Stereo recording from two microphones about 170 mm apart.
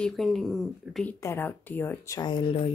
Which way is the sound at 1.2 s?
10° left (ahead or behind).